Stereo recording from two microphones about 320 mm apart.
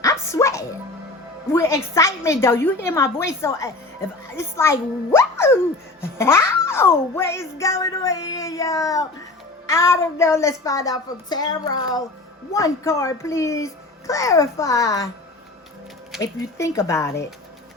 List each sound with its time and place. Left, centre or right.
0.0 s a child's voice: centre
16.1 s a child's voice: centre